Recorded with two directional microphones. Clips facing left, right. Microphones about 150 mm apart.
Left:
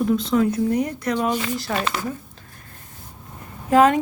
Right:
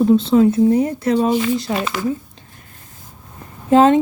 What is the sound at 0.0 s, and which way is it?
Speech, 30° right (ahead or behind).